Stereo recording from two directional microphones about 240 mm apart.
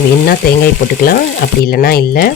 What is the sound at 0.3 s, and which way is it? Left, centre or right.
Speech, left.